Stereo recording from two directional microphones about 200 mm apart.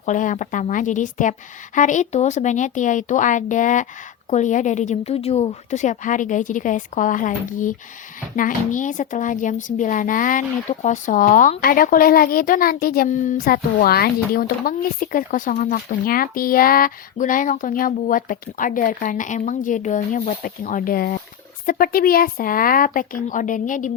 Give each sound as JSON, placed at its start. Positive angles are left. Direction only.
{"t": 0.0, "sound": "speech", "side_deg": 40}